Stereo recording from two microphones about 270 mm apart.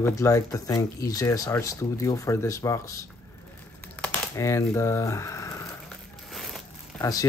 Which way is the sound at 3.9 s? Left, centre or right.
Centre.